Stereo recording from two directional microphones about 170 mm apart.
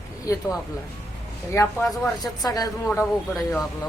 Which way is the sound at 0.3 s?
20° left (ahead or behind).